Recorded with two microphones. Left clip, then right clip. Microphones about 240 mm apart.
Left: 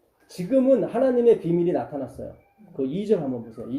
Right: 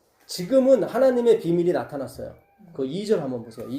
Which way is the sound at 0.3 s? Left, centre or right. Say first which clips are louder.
Right 2 dB; right.